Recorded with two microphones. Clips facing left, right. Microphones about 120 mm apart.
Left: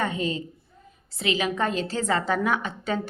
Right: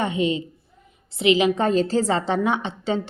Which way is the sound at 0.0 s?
20° right (ahead or behind).